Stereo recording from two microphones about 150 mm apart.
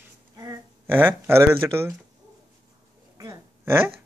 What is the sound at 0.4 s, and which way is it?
Speech, 20° right (ahead or behind).